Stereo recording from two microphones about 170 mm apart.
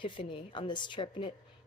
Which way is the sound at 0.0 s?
30° left (ahead or behind).